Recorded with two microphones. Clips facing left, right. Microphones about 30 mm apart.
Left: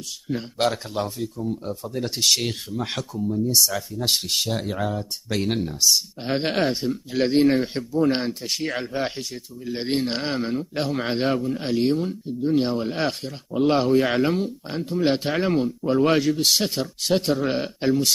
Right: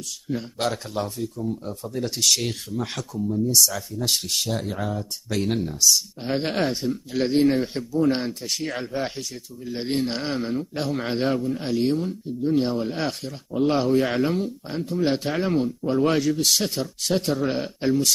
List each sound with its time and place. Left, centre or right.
0.3 s speech: left
0.7 s a man's voice: centre
3.2 s speech: centre
4.3 s a man's voice: centre
16.2 s a man's voice: left; by 18.1 s centre